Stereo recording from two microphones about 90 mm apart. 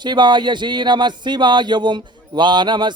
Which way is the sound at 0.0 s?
55° right (ahead or behind).